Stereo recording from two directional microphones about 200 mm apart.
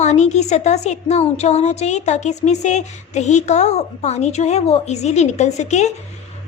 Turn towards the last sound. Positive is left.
turn(degrees=35)  # may be behind; listen again after turning